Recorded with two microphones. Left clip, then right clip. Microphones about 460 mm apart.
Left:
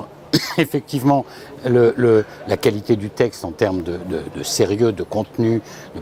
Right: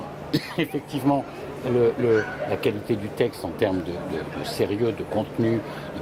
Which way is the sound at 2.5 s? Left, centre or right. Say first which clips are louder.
Left 9 dB; left.